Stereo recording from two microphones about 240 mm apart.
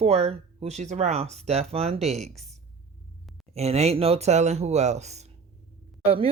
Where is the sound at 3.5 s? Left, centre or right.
Right.